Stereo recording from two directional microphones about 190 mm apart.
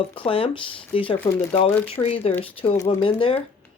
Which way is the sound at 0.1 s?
30° left (ahead or behind).